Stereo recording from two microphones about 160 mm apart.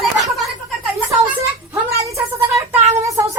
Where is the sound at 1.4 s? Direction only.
20° right (ahead or behind).